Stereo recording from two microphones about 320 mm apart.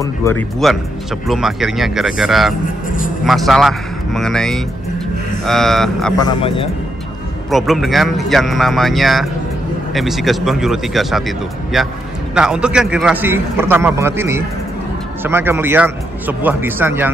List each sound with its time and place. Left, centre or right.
0.0 s speech: centre
6.1 s speech: centre
7.5 s a man's voice: centre